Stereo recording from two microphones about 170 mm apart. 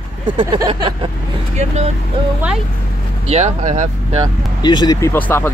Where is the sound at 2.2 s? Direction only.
30° right (ahead or behind).